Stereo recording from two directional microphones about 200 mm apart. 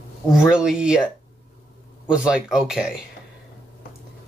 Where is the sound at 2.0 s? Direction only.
5° right (ahead or behind).